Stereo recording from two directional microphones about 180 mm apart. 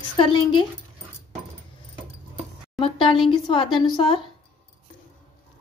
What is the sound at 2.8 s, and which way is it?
A woman's voice, 30° left (ahead or behind).